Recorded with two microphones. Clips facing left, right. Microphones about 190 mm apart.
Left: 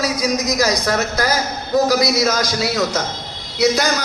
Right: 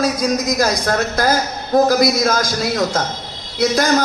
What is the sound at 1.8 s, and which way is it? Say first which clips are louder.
Speech: right 2 dB; 50° right (ahead or behind).